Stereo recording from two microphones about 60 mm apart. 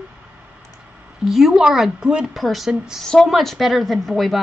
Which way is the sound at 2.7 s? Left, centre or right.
Centre.